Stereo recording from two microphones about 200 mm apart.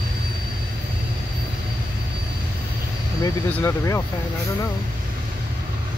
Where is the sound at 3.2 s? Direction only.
15° left (ahead or behind).